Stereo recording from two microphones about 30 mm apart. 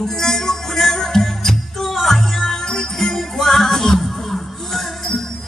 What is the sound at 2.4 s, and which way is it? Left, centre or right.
Music, centre.